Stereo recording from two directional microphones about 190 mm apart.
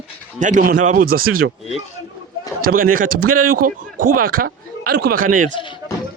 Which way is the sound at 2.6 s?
50° right (ahead or behind).